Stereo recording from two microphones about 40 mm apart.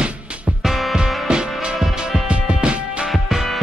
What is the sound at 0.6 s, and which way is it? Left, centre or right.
Music, centre.